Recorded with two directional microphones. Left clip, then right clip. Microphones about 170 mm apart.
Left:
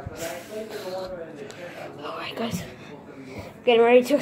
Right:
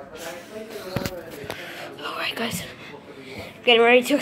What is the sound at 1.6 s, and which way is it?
Whispering, 5° left (ahead or behind).